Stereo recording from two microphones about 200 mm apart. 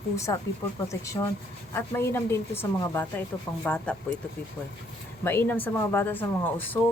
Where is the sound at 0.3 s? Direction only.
20° left (ahead or behind).